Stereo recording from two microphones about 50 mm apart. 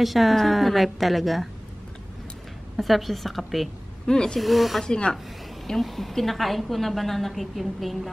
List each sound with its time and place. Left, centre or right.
0.0 s a woman's voice: centre
2.8 s a woman's voice: centre
4.1 s speech: centre
4.4 s a woman's voice: centre
4.8 s speech: centre
5.7 s a woman's voice: centre